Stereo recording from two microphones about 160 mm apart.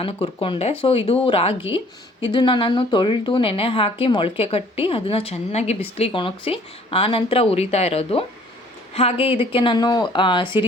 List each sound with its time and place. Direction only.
0.0 s a woman's voice: 35° left (ahead or behind)